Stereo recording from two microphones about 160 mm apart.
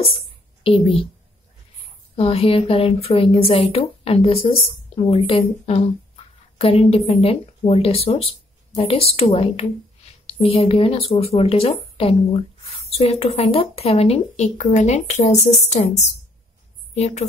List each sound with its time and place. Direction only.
0.7 s speech: 35° left (ahead or behind)
2.1 s speech: 35° left (ahead or behind)
16.9 s a woman's voice: 45° left (ahead or behind)